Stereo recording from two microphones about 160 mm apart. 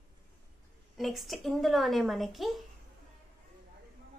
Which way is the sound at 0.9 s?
Centre (ahead or behind).